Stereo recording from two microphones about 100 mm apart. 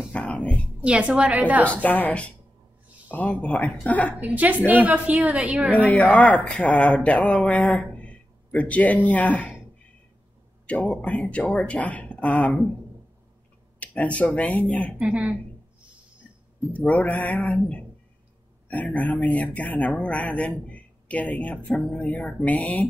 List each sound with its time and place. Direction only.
0.1 s a sound: 10° left (ahead or behind)
0.7 s a woman's voice: 10° right (ahead or behind)
1.7 s speech: 15° left (ahead or behind)
3.3 s speech: 10° left (ahead or behind)
4.2 s a woman's voice: 15° right (ahead or behind)
5.1 s a woman's voice: 5° right (ahead or behind)
5.9 s speech: 15° left (ahead or behind)
10.7 s speech: 10° left (ahead or behind)
13.7 s speech: 15° left (ahead or behind)
15.0 s a woman's voice: 10° right (ahead or behind)
16.7 s speech: 15° left (ahead or behind)
18.7 s speech: 15° left (ahead or behind)
21.9 s speech: 15° left (ahead or behind)